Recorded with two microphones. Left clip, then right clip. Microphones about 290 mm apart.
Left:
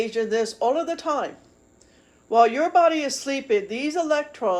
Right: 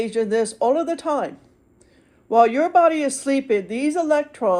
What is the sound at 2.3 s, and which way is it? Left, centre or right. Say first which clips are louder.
Speech: right 2 dB; right.